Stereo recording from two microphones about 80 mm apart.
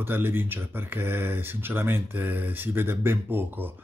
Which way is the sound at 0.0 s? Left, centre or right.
Right.